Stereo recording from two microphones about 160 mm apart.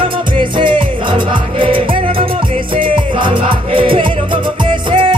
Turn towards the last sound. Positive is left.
turn(degrees=-30)  # may be behind; listen again after turning